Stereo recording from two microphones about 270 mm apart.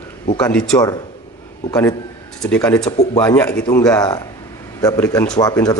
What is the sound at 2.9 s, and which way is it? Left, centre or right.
Speech, left.